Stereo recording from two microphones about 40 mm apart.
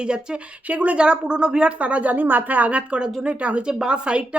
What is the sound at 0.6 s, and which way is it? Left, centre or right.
Speech, right.